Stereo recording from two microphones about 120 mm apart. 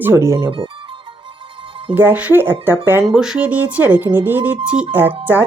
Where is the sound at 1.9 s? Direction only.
15° right (ahead or behind).